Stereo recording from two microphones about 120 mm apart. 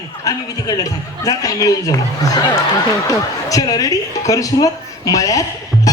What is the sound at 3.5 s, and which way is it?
Speech, 30° left (ahead or behind).